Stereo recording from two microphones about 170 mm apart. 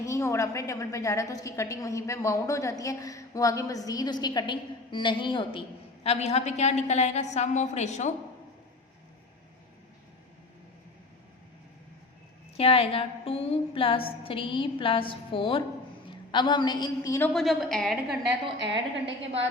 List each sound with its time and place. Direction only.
0.0 s a woman's voice: 15° left (ahead or behind); by 8.1 s 40° left (ahead or behind)
12.5 s a sound: 35° left (ahead or behind)
16.0 s a woman's voice: 25° left (ahead or behind)
17.3 s a woman's voice: centre (ahead or behind)
18.6 s a woman's voice: 90° right